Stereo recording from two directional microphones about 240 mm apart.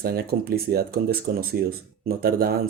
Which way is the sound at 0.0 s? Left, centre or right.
Right.